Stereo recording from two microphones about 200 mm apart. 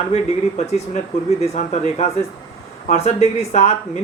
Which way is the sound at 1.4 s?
35° left (ahead or behind).